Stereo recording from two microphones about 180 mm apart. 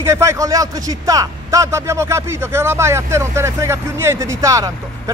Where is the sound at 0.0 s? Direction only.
15° right (ahead or behind).